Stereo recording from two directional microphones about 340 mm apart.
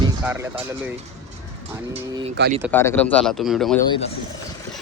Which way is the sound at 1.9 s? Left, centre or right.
Centre.